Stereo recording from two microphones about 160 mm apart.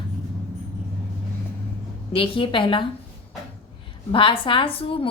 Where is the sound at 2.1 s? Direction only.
35° left (ahead or behind).